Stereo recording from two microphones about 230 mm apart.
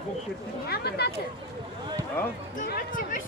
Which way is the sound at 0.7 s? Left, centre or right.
Left.